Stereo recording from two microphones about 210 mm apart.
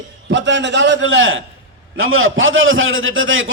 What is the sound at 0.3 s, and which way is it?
A man's voice, 60° right (ahead or behind).